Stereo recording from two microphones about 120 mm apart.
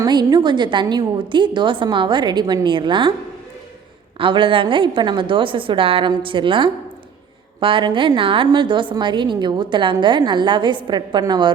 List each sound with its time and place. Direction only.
0.0 s a woman's voice: 35° right (ahead or behind)
4.2 s a woman's voice: 45° right (ahead or behind)